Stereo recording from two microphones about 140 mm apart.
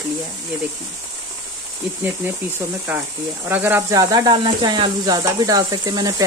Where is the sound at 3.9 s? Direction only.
25° right (ahead or behind).